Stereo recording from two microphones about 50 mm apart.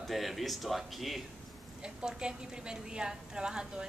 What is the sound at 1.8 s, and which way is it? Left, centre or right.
A woman's voice, centre.